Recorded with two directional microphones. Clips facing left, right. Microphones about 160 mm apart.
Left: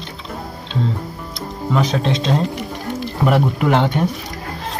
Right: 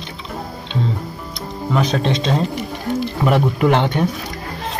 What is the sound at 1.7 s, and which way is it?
Speech, centre (ahead or behind).